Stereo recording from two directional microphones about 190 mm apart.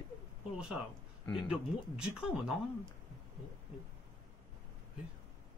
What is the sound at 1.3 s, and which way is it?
Speech, 5° right (ahead or behind).